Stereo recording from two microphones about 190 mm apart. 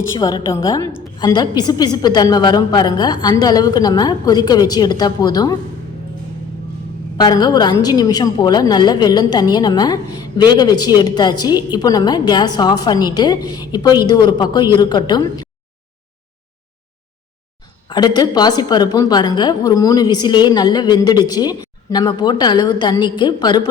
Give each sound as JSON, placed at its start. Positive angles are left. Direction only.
{"t": 0.2, "sound": "a woman's voice", "side_deg": 20}
{"t": 7.2, "sound": "a woman's voice", "side_deg": 20}
{"t": 17.8, "sound": "a woman's voice", "side_deg": 20}